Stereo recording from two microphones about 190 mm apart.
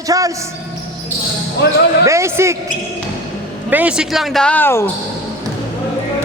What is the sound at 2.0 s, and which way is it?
Speech, 15° right (ahead or behind).